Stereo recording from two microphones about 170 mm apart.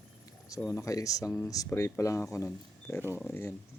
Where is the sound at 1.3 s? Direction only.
Centre (ahead or behind).